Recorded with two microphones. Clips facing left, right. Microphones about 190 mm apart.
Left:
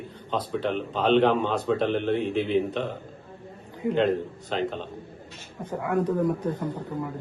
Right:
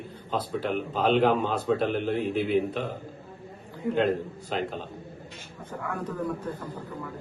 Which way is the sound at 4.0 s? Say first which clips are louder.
Left 1 dB; 10° right (ahead or behind).